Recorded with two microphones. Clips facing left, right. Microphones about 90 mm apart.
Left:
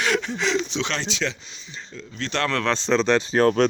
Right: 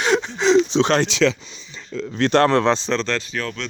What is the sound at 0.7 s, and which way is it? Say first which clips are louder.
Speech: right 10 dB; 35° right (ahead or behind).